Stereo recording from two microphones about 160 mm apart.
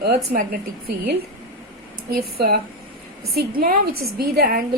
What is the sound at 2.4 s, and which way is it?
Speech, 80° right.